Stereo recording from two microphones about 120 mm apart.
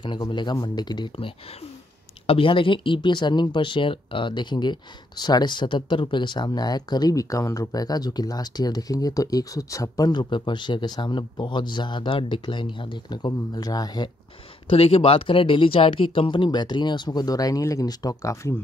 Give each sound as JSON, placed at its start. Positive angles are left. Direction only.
{"t": 0.3, "sound": "speech", "side_deg": 40}
{"t": 1.1, "sound": "speech", "side_deg": 55}
{"t": 14.7, "sound": "speech", "side_deg": 55}